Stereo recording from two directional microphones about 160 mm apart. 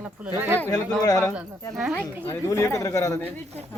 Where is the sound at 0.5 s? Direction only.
15° left (ahead or behind).